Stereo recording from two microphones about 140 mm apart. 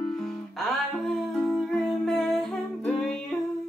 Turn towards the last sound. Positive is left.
turn(degrees=5)  # may be behind; listen again after turning